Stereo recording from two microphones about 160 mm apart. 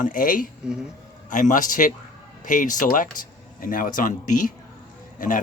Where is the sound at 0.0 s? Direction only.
60° left (ahead or behind).